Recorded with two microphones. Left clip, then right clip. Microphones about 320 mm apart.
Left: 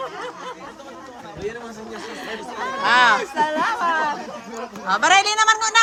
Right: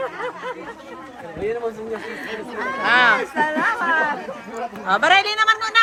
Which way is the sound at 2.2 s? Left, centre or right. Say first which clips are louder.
Right 1 dB; centre.